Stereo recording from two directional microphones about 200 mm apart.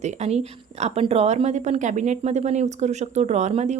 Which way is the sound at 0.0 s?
35° right (ahead or behind).